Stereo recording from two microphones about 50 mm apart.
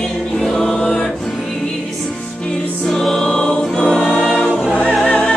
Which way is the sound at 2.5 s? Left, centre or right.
Centre.